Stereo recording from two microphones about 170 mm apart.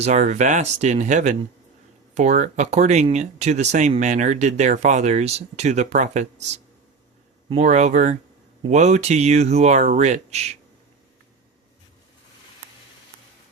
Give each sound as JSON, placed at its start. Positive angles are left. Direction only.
{"t": 0.0, "sound": "speech", "side_deg": -45}